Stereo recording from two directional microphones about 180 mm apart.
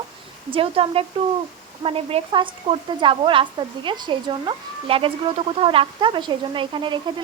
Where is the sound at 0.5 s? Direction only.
30° right (ahead or behind).